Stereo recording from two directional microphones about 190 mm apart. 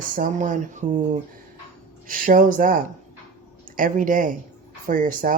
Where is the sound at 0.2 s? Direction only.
40° right (ahead or behind).